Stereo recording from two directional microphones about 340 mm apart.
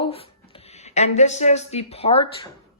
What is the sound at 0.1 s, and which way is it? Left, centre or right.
Speech, centre.